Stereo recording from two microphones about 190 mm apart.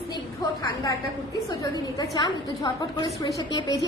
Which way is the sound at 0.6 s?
20° left (ahead or behind).